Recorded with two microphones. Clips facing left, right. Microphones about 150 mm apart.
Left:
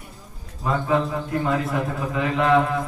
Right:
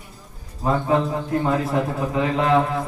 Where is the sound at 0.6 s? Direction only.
25° right (ahead or behind).